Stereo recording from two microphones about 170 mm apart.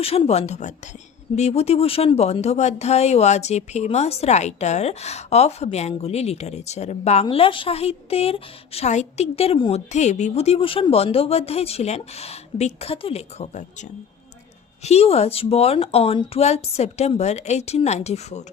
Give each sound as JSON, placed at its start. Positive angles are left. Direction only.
{"t": 0.0, "sound": "speech", "side_deg": 35}
{"t": 14.8, "sound": "speech", "side_deg": 35}